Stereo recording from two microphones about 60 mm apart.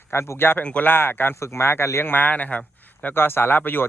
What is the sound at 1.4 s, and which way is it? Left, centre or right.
Speech, left.